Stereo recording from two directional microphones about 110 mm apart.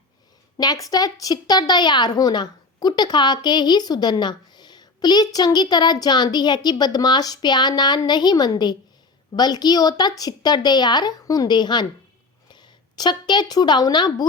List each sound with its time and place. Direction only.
0.5 s a woman's voice: 35° left (ahead or behind)